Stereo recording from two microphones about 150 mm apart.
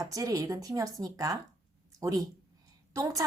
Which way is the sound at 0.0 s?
25° right (ahead or behind).